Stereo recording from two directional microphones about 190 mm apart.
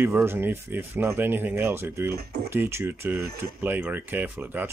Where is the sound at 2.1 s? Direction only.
55° right (ahead or behind).